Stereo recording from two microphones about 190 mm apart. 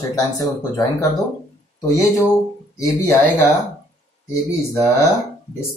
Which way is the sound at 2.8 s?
15° left (ahead or behind).